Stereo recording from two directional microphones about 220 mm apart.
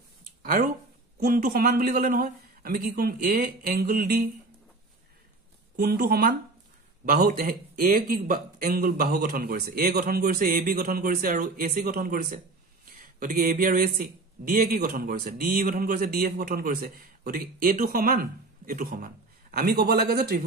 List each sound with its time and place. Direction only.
0.4 s a sound: 40° right (ahead or behind)
1.2 s speech: 40° right (ahead or behind)
5.8 s speech: 45° right (ahead or behind)